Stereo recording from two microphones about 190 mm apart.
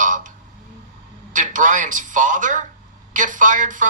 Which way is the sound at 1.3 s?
45° right (ahead or behind).